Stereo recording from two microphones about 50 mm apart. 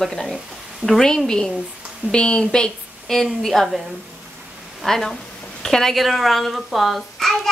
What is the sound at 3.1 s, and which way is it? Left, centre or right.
Speech, centre.